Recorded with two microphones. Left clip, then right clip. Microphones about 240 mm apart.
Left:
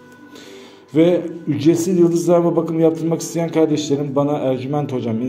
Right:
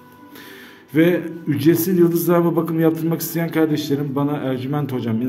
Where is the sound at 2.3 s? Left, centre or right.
Right.